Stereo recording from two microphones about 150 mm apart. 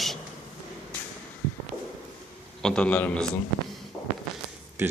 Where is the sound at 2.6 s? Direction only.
5° left (ahead or behind).